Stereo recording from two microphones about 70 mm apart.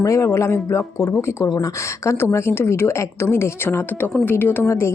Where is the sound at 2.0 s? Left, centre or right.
Left.